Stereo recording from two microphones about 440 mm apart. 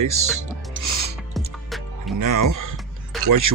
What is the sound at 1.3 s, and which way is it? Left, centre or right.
Music, centre.